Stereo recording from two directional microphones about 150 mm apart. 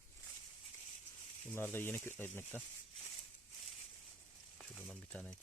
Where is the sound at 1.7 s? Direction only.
15° left (ahead or behind).